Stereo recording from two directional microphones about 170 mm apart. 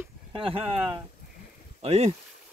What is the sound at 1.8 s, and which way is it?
Speech, 40° right (ahead or behind).